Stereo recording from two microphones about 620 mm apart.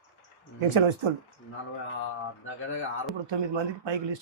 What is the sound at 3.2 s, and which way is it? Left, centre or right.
Speech, right.